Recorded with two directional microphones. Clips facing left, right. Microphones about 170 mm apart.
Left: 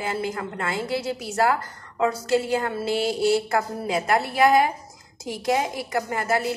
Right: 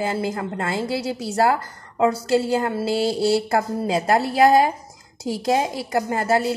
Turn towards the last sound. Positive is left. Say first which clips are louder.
# right 4 dB
turn(degrees=-30)  # may be behind; listen again after turning